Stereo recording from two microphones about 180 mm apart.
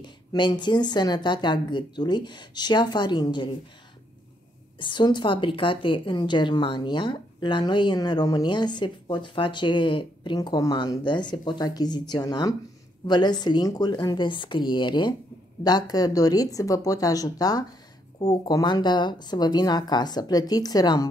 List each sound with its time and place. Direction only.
0.0 s a woman's voice: 25° left (ahead or behind)
4.7 s a woman's voice: 25° left (ahead or behind)